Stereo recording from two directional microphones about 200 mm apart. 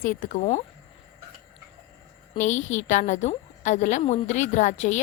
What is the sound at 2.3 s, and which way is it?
A woman's voice, 35° left (ahead or behind).